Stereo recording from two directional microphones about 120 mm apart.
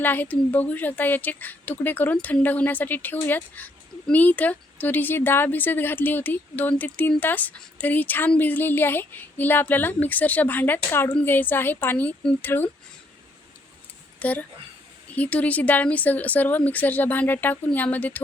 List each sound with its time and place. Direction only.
0.0 s speech: 15° left (ahead or behind)
14.2 s a woman's voice: 10° left (ahead or behind)